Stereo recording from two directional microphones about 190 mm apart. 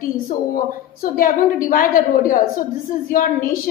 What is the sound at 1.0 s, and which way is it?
A woman's voice, 45° left (ahead or behind).